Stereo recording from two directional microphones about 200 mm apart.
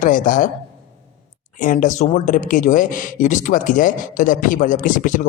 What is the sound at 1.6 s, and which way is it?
Speech, 40° left (ahead or behind).